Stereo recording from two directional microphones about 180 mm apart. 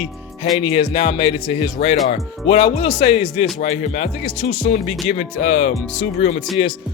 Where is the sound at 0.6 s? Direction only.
30° left (ahead or behind); by 6.3 s 45° left (ahead or behind).